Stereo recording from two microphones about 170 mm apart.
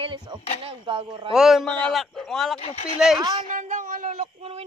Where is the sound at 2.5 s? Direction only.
35° left (ahead or behind).